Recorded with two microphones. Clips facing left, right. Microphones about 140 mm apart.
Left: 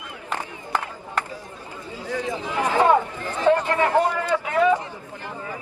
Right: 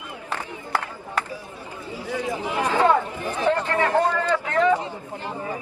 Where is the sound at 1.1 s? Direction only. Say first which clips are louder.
Right 1 dB; 15° right (ahead or behind).